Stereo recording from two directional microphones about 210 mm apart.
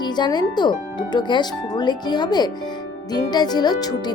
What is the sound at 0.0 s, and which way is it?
Speech, 20° left (ahead or behind).